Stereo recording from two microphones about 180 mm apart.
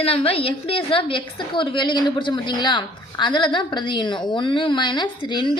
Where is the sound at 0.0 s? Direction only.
30° left (ahead or behind).